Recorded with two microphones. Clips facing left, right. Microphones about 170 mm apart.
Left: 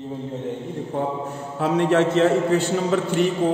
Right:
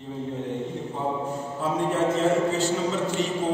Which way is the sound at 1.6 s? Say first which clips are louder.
Left 6 dB; 75° left (ahead or behind).